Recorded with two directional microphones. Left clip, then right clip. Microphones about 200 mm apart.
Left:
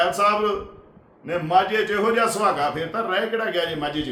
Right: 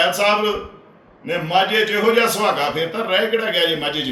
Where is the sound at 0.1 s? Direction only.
20° left (ahead or behind).